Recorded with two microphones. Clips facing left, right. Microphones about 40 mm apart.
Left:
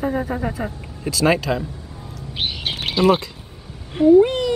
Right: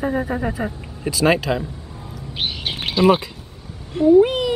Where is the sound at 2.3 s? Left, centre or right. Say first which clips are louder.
Even; centre.